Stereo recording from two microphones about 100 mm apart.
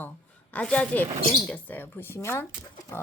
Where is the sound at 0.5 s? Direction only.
10° left (ahead or behind).